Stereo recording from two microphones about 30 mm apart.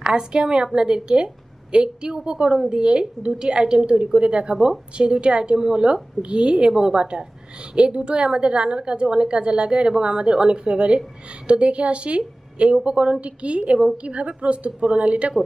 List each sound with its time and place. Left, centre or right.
0.0 s a woman's voice: right
6.7 s a woman's voice: centre
7.0 s a woman's voice: right